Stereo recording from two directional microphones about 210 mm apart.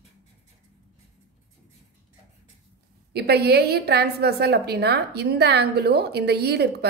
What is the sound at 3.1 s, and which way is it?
A woman's voice, 50° right (ahead or behind).